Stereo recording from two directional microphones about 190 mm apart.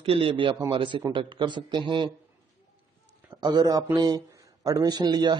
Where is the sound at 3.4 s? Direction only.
20° right (ahead or behind).